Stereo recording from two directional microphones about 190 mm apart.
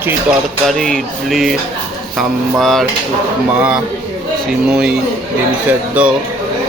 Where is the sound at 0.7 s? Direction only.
Centre (ahead or behind).